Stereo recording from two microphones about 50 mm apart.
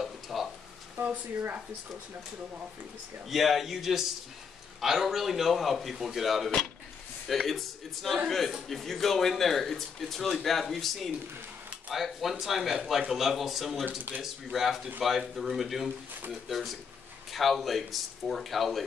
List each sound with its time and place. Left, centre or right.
0.0 s a sound: centre
3.3 s speech: centre
13.8 s speech: right
14.2 s speech: centre